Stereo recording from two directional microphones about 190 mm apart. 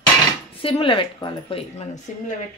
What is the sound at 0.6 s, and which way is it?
Speech, 30° left (ahead or behind).